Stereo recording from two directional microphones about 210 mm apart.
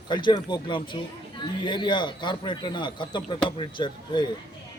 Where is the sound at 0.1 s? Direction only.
20° left (ahead or behind).